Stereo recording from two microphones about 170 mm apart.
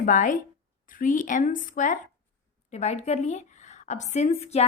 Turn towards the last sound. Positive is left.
turn(degrees=40)  # may be behind; listen again after turning